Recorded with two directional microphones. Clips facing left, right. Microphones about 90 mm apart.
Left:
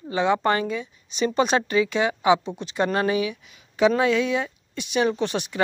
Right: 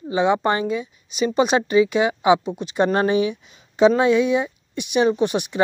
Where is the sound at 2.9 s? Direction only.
30° right (ahead or behind).